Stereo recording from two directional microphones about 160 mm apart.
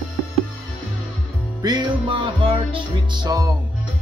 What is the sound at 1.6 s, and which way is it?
Music, 25° right (ahead or behind).